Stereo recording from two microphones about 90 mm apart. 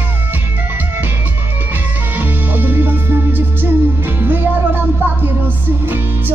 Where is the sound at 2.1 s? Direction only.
20° right (ahead or behind).